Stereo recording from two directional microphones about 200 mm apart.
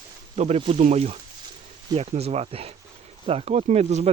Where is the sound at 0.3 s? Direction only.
30° right (ahead or behind).